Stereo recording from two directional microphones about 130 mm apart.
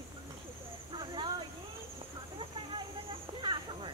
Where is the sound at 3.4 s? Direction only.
35° right (ahead or behind).